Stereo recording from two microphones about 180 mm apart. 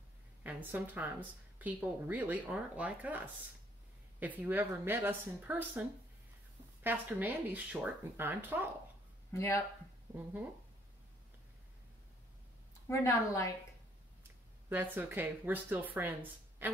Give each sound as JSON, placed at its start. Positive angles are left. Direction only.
{"t": 0.4, "sound": "a woman's voice", "side_deg": -10}
{"t": 4.2, "sound": "speech", "side_deg": -10}
{"t": 9.3, "sound": "speech", "side_deg": 15}
{"t": 12.8, "sound": "a woman's voice", "side_deg": 15}
{"t": 14.7, "sound": "speech", "side_deg": -10}